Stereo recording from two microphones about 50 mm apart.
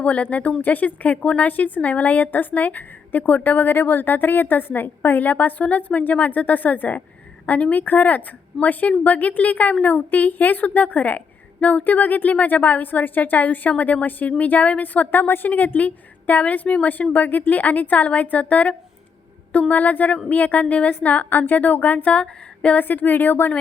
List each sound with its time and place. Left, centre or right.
0.0 s speech: left
1.5 s a woman's voice: left
22.1 s a sound: left
22.8 s a woman's voice: left